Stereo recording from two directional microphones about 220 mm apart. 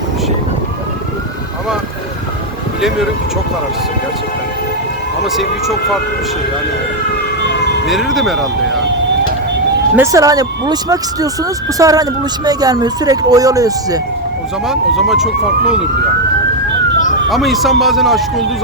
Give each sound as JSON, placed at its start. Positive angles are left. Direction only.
{"t": 5.2, "sound": "speech", "side_deg": 0}
{"t": 7.5, "sound": "emergency vehicle", "side_deg": 50}
{"t": 7.9, "sound": "speech", "side_deg": 0}
{"t": 9.9, "sound": "speech", "side_deg": -15}
{"t": 14.7, "sound": "speech", "side_deg": 0}
{"t": 17.2, "sound": "speech", "side_deg": 0}